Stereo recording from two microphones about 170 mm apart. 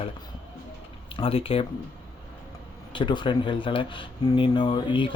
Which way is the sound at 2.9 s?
30° left (ahead or behind).